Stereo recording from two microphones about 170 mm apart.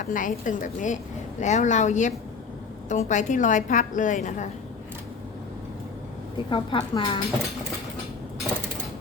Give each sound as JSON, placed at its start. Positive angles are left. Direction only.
{"t": 0.0, "sound": "a woman's voice", "side_deg": 50}
{"t": 6.3, "sound": "a woman's voice", "side_deg": 30}